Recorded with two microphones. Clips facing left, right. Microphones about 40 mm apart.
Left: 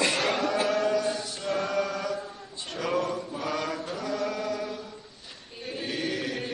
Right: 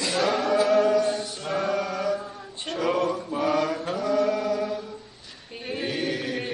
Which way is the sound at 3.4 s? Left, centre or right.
Centre.